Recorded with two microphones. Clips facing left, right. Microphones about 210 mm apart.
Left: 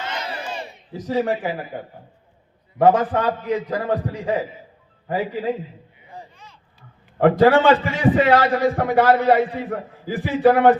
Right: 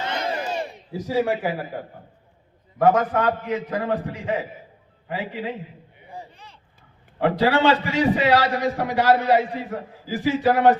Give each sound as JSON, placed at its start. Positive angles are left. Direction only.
{"t": 0.2, "sound": "battle cry", "side_deg": -45}
{"t": 0.9, "sound": "a man's voice", "side_deg": -10}
{"t": 2.7, "sound": "a man's voice", "side_deg": 30}
{"t": 6.3, "sound": "a sound", "side_deg": -35}
{"t": 7.2, "sound": "a man's voice", "side_deg": 50}